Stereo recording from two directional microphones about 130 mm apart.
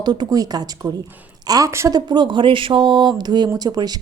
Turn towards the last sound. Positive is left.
turn(degrees=-30)  # may be behind; listen again after turning